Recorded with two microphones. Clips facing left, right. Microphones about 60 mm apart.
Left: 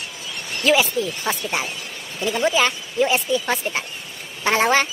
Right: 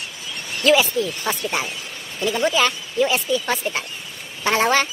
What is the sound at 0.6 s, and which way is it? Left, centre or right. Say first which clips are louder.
A woman's voice: right 1 dB; centre.